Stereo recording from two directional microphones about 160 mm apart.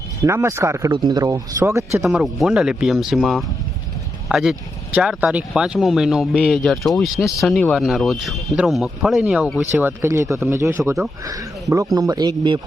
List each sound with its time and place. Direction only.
0.2 s speech: 20° right (ahead or behind)
2.0 s speech: centre (ahead or behind); by 10.9 s 15° right (ahead or behind)
11.9 s speech: 25° right (ahead or behind)